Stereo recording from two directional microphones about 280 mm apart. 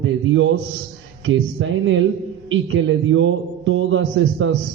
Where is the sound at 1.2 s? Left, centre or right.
Right.